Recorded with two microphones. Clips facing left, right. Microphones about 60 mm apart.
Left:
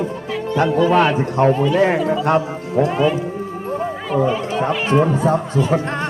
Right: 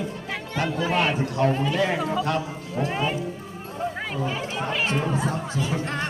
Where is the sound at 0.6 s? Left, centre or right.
Left.